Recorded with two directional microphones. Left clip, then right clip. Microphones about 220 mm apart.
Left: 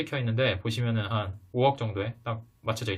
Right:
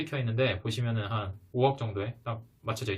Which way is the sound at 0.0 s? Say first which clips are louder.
Left 2 dB; 20° left (ahead or behind).